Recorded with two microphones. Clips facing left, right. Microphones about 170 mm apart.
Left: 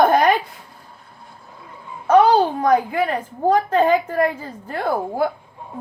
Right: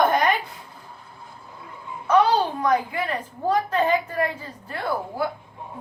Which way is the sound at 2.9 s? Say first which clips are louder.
Left 6 dB; 50° left (ahead or behind).